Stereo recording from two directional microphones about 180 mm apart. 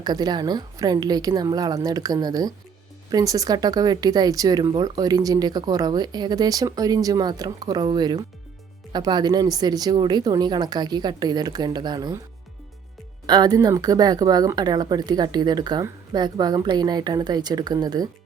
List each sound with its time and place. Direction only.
0.0 s speech: 25° right (ahead or behind)
13.2 s speech: 25° right (ahead or behind)